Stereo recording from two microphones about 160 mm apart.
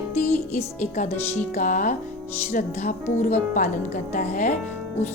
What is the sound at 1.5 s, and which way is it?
A woman's voice, 55° left (ahead or behind).